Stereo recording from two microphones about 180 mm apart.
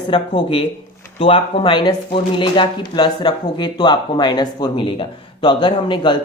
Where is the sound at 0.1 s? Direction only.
25° left (ahead or behind).